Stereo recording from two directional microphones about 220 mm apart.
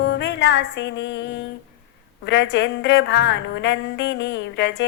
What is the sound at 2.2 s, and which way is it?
A woman's voice, 50° left (ahead or behind).